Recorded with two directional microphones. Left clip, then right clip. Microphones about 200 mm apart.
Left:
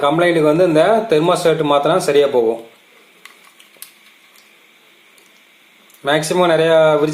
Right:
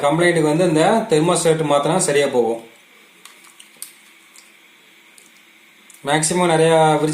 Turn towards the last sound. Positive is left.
turn(degrees=15)  # may be behind; listen again after turning